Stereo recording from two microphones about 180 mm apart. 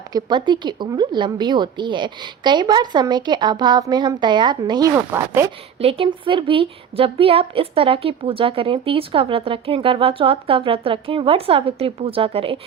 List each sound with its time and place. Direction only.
0.1 s a woman's voice: 25° right (ahead or behind)
5.8 s a woman's voice: 30° right (ahead or behind)